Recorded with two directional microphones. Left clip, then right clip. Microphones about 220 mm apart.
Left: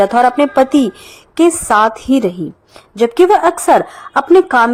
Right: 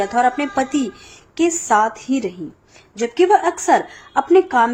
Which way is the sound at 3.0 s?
30° left (ahead or behind).